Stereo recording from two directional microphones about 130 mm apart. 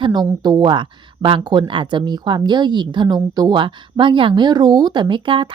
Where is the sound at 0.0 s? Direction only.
30° right (ahead or behind).